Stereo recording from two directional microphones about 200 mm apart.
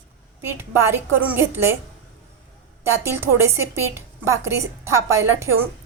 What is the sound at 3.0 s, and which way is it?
A woman's voice, 15° right (ahead or behind).